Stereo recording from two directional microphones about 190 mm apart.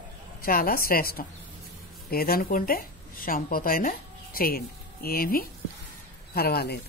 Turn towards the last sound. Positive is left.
turn(degrees=55)  # may be behind; listen again after turning